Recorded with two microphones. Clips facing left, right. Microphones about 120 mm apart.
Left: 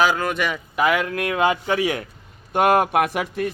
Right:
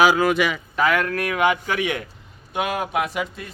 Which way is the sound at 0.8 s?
15° left (ahead or behind).